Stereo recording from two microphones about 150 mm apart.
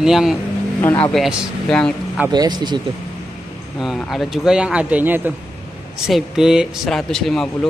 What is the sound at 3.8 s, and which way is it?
Speech, centre (ahead or behind).